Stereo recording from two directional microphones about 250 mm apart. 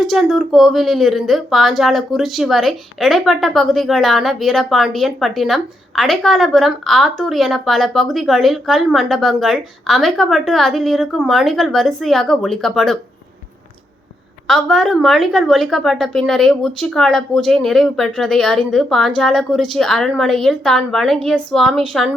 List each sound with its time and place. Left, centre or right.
0.0 s speech: centre
14.4 s speech: centre